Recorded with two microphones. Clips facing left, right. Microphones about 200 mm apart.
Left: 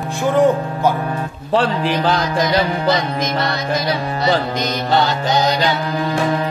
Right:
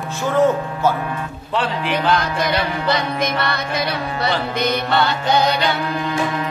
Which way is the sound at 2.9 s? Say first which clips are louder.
Left 1 dB; 60° right (ahead or behind).